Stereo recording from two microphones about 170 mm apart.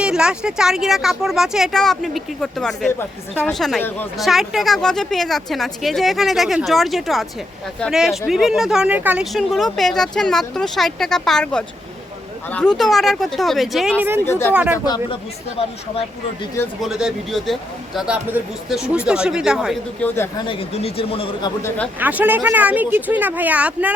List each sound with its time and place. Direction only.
0.0 s speech: 5° right (ahead or behind)
14.3 s speech: 15° left (ahead or behind)
14.5 s speech: 10° right (ahead or behind)
14.8 s speech: 25° left (ahead or behind)
16.8 s speech: 5° right (ahead or behind)
20.0 s speech: 15° left (ahead or behind)
20.5 s speech: 35° left (ahead or behind)
21.9 s speech: 10° right (ahead or behind)